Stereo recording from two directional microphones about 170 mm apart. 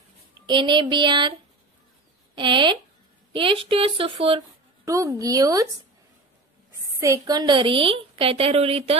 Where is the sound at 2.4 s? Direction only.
30° right (ahead or behind).